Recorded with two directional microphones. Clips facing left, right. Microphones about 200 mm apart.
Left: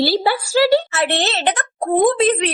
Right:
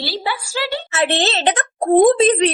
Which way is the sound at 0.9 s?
20° right (ahead or behind).